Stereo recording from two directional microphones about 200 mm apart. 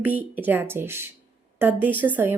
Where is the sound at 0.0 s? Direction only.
10° right (ahead or behind).